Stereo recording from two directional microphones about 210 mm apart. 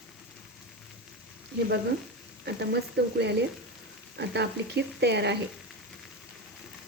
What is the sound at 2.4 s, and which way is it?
Speech, 50° right (ahead or behind).